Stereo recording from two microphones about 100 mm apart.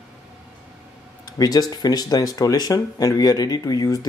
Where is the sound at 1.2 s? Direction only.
40° left (ahead or behind).